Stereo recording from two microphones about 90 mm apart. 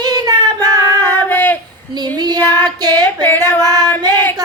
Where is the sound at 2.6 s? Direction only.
45° right (ahead or behind).